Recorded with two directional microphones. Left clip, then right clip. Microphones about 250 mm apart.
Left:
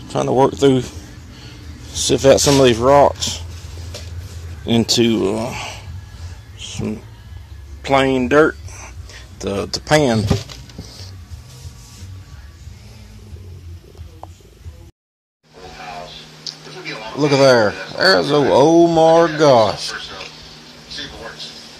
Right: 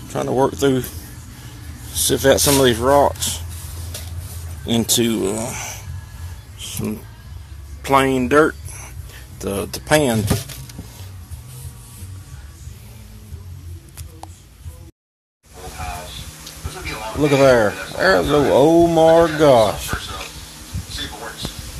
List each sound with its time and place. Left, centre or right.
0.1 s speech: centre
4.6 s speech: centre
7.8 s speech: centre
16.8 s speech: centre